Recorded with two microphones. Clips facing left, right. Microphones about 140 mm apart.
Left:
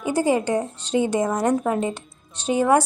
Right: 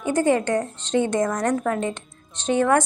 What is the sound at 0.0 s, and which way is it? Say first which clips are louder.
A woman's voice: right 1 dB; 10° left (ahead or behind).